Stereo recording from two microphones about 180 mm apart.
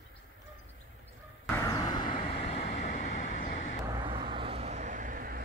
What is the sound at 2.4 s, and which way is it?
Vehicle, 35° left (ahead or behind).